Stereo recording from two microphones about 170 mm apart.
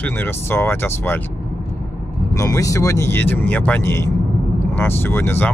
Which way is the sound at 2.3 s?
20° left (ahead or behind).